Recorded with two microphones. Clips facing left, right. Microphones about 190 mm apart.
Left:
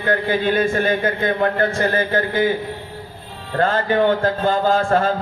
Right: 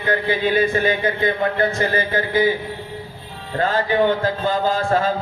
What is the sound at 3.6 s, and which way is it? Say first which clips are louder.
A man's voice: left 1 dB; 50° left (ahead or behind).